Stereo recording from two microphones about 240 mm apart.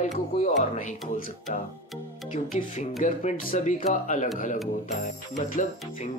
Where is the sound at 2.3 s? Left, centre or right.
Left.